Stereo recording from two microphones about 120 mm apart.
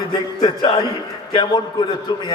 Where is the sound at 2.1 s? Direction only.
40° left (ahead or behind).